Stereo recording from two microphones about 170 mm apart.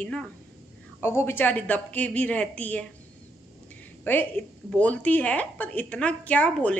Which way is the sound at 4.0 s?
10° left (ahead or behind).